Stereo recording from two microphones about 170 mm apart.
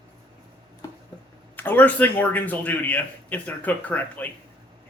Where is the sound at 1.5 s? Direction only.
10° left (ahead or behind).